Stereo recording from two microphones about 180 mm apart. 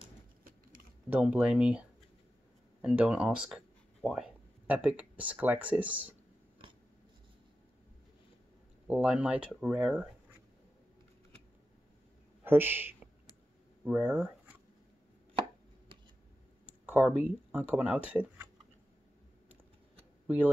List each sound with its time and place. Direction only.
0.4 s a sound: 50° right (ahead or behind)
1.1 s speech: 10° right (ahead or behind)
8.8 s speech: 5° right (ahead or behind)
12.4 s a sound: 10° right (ahead or behind)
13.8 s speech: 5° right (ahead or behind)
16.6 s speech: 10° right (ahead or behind)